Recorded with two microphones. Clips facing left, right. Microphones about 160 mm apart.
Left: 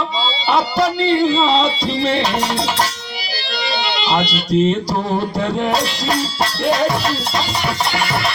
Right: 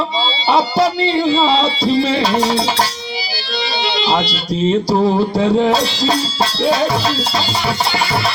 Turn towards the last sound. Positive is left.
turn(degrees=-30)  # may be behind; listen again after turning